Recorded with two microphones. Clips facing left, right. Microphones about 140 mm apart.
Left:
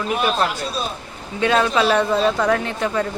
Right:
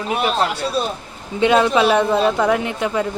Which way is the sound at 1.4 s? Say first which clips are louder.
Right 3 dB; 20° right (ahead or behind).